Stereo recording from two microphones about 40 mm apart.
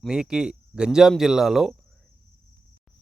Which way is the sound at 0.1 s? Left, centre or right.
Centre.